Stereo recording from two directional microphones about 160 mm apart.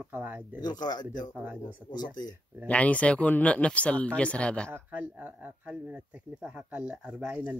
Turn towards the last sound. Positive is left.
turn(degrees=-10)  # may be behind; listen again after turning